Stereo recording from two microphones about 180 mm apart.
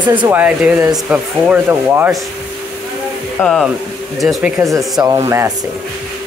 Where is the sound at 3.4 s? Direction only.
Centre (ahead or behind).